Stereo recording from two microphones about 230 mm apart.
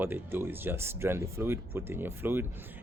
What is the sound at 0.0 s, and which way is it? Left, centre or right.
Speech, centre.